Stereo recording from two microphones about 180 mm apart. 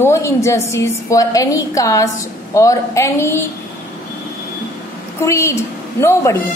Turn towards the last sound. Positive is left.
turn(degrees=15)  # may be behind; listen again after turning